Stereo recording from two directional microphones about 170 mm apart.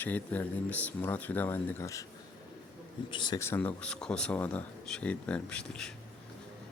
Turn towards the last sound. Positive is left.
turn(degrees=5)  # may be behind; listen again after turning